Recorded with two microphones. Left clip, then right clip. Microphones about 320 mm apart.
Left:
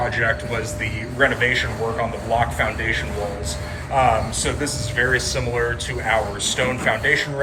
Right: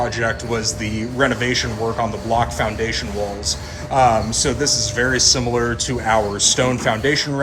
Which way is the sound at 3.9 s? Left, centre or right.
Right.